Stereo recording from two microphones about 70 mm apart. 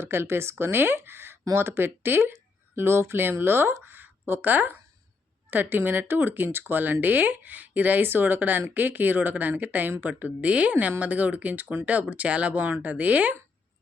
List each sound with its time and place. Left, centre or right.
0.0 s speech: right
3.8 s a sound: right
5.5 s speech: right